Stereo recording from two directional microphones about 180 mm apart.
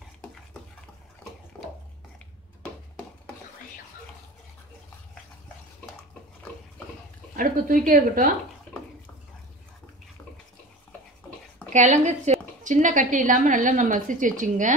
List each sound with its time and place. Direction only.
7.3 s a woman's voice: 50° right (ahead or behind)
11.7 s a woman's voice: 40° right (ahead or behind)